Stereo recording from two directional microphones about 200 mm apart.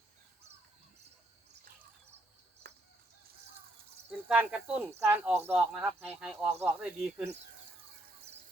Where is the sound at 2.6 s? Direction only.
50° right (ahead or behind).